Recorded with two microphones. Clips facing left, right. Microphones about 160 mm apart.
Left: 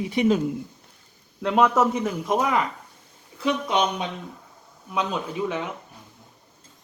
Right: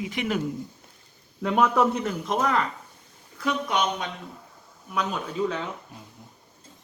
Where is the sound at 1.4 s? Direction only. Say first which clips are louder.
Left 2 dB; centre (ahead or behind).